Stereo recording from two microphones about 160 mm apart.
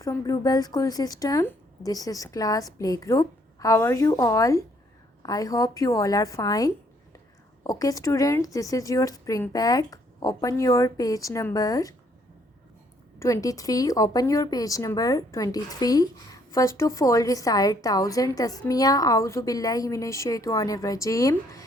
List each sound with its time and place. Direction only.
0.0 s speech: 20° left (ahead or behind)
13.1 s speech: 20° left (ahead or behind)